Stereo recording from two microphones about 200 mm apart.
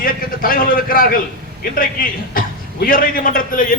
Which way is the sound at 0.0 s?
45° left (ahead or behind).